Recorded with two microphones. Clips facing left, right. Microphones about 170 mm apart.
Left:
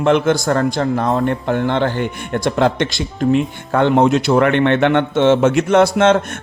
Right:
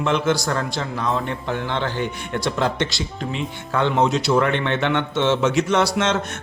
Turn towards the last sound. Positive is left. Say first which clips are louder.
# left 8 dB
turn(degrees=55)  # may be behind; listen again after turning